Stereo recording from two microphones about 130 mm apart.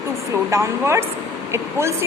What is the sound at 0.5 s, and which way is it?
A woman's voice, 20° right (ahead or behind).